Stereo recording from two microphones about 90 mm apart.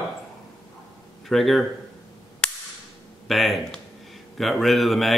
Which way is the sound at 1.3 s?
Centre (ahead or behind).